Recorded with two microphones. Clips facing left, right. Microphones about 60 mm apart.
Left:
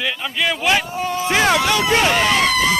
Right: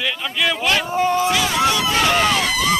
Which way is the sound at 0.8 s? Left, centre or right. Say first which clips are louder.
Right 5 dB; right.